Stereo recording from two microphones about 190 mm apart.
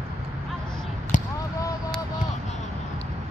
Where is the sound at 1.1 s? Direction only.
45° left (ahead or behind).